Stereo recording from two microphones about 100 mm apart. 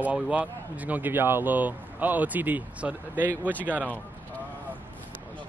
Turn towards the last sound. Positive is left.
turn(degrees=-15)  # may be behind; listen again after turning